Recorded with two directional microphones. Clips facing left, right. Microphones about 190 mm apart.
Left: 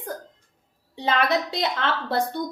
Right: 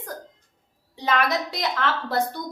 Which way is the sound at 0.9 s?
30° left (ahead or behind).